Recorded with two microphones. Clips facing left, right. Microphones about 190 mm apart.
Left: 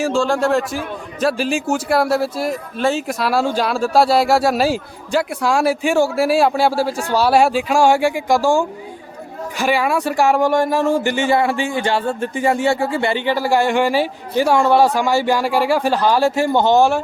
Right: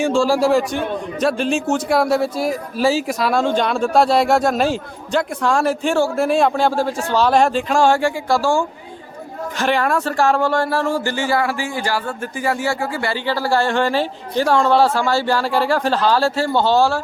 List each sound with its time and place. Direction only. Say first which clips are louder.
0.0 s a man's voice: right 1 dB; centre (ahead or behind); by 17.0 s 20° left (ahead or behind)